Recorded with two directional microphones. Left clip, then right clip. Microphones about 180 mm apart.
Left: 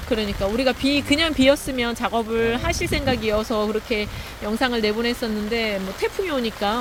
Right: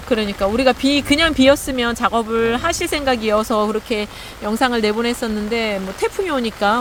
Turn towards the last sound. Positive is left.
turn(degrees=-20)  # may be behind; listen again after turning